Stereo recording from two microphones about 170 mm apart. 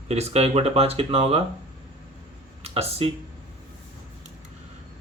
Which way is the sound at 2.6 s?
35° right (ahead or behind).